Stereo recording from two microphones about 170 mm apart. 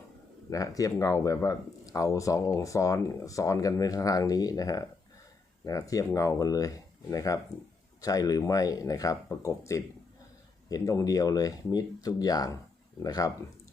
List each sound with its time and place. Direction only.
0.5 s speech: 20° left (ahead or behind)